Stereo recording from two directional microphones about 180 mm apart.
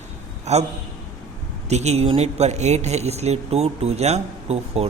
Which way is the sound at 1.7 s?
35° right (ahead or behind).